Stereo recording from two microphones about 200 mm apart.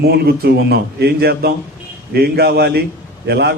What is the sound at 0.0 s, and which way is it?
A man's voice, 55° right (ahead or behind).